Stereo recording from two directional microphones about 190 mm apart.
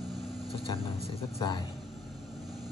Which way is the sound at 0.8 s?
30° left (ahead or behind).